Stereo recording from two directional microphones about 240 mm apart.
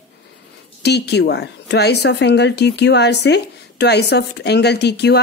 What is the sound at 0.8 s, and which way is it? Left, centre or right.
A woman's voice, left.